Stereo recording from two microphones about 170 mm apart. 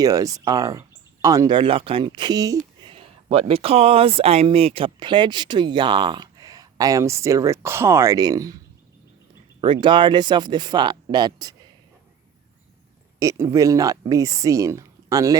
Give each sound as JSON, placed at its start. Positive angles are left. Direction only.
{"t": 0.0, "sound": "speech", "side_deg": -20}
{"t": 2.8, "sound": "speech", "side_deg": -30}
{"t": 9.8, "sound": "speech", "side_deg": -30}
{"t": 13.1, "sound": "speech", "side_deg": -15}